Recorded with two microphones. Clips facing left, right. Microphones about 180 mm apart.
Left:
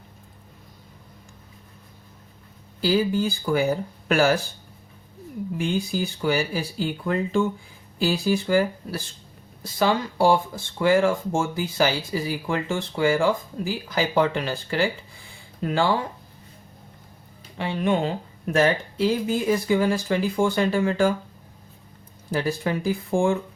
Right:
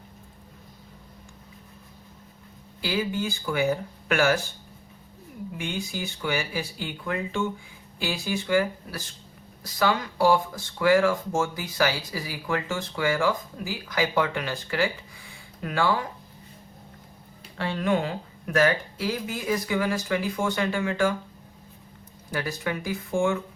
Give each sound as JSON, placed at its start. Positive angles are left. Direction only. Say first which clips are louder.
{"t": 2.8, "sound": "speech", "louder": "left 6 dB", "side_deg": 35}
{"t": 5.5, "sound": "speech", "louder": "left 7 dB", "side_deg": 35}
{"t": 17.6, "sound": "speech", "louder": "left 2 dB", "side_deg": 20}
{"t": 22.3, "sound": "speech", "louder": "left 5 dB", "side_deg": 30}